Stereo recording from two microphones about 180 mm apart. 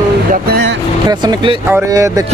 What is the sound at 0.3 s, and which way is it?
Vehicle, 65° right (ahead or behind).